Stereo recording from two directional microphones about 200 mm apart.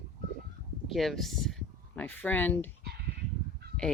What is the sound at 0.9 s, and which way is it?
Speech, centre (ahead or behind).